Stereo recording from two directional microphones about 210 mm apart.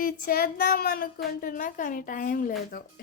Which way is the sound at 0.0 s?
45° left (ahead or behind).